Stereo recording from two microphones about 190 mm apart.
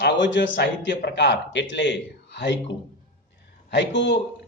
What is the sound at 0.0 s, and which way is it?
A man's voice, 70° left (ahead or behind).